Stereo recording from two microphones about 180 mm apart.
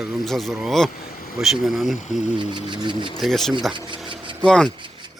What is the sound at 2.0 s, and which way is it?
Speech, 45° left (ahead or behind).